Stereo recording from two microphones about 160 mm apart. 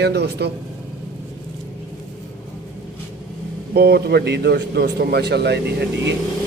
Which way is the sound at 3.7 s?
75° right (ahead or behind).